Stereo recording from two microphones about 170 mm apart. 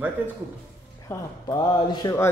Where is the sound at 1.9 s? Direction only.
25° left (ahead or behind).